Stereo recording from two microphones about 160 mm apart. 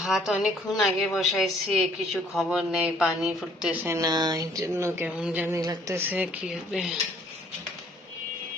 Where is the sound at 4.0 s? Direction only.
25° right (ahead or behind).